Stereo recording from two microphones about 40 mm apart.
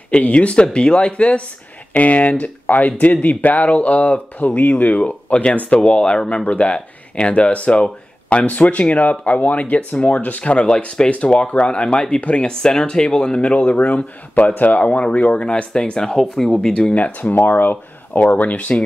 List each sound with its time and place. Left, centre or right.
0.1 s speech: left
4.6 s speech: left
8.5 s speech: left
10.4 s speech: left; by 16.7 s centre
16.9 s speech: left
18.2 s speech: left